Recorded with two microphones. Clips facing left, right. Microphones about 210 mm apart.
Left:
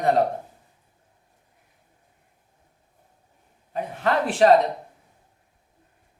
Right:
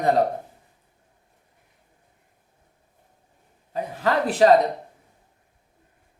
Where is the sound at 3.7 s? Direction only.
35° right (ahead or behind).